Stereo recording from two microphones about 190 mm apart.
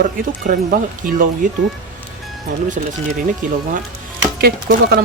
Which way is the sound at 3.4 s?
40° right (ahead or behind).